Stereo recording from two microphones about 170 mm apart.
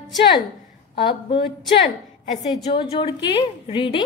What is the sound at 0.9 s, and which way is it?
Speech, 30° left (ahead or behind).